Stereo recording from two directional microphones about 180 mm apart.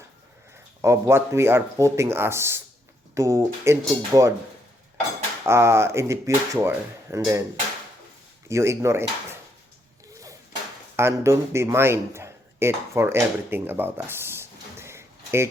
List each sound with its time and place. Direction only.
0.8 s speech: 15° right (ahead or behind)
5.4 s speech: 15° right (ahead or behind)
8.4 s speech: 15° right (ahead or behind)
10.9 s a man's voice: 15° right (ahead or behind)